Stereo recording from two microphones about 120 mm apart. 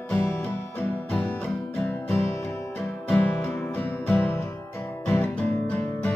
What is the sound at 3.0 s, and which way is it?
Music, 10° left (ahead or behind).